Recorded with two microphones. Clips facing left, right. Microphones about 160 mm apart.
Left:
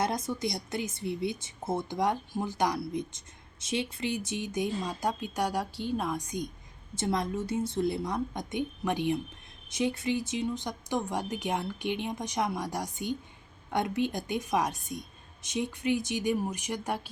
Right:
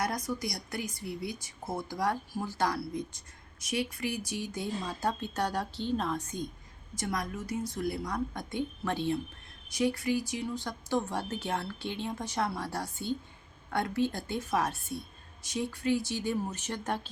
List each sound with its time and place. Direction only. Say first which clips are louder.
0.0 s speech: left 3 dB; 25° left (ahead or behind)
6.9 s speech: left 5 dB; 25° left (ahead or behind)